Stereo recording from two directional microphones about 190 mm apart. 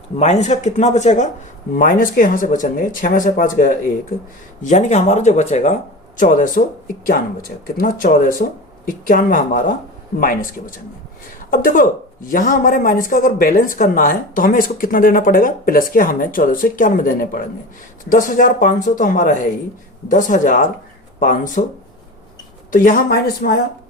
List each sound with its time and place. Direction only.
0.2 s a man's voice: 35° left (ahead or behind)
22.7 s a man's voice: 45° left (ahead or behind)